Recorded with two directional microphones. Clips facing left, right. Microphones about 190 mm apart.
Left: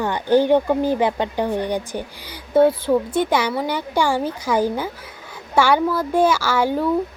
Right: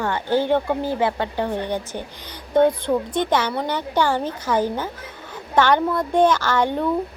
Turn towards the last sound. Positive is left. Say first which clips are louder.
# left 1 dB
turn(degrees=5)  # may be behind; listen again after turning